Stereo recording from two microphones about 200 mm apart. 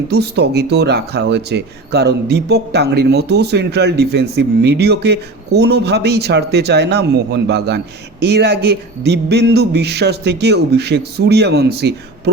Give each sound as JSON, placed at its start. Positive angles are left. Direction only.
{"t": 0.1, "sound": "speech", "side_deg": -55}